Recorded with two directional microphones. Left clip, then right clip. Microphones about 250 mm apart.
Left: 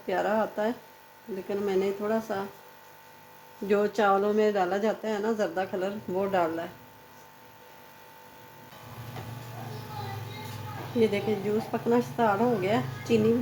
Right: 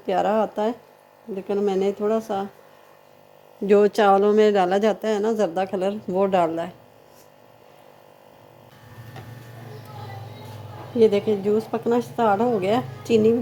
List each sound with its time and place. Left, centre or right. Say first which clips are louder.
0.0 s speech: right 6 dB; right
3.7 s speech: right 8 dB; right
11.0 s speech: right 8 dB; right